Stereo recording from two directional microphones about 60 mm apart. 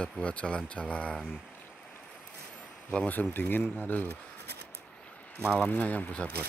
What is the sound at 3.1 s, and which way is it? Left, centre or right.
Speech, left.